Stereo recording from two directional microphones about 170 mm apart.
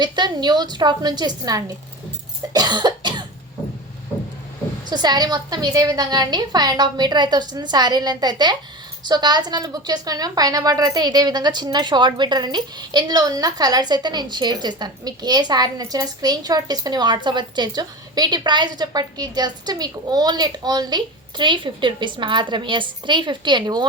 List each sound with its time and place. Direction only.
0.0 s a woman's voice: 25° right (ahead or behind)
2.5 s cough: 25° right (ahead or behind)
4.9 s a woman's voice: 25° right (ahead or behind)